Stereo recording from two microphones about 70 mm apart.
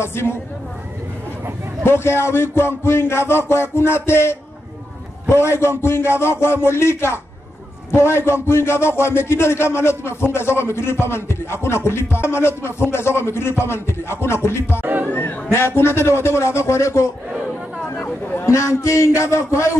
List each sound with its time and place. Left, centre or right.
0.0 s a man's voice: left
1.9 s a man's voice: left
14.8 s speech: right
15.0 s a man's voice: left
18.4 s a man's voice: left